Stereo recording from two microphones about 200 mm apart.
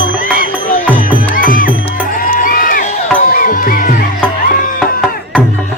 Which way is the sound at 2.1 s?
45° left (ahead or behind).